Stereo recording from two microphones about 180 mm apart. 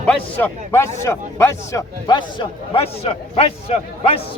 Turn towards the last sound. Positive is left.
turn(degrees=35)  # may be behind; listen again after turning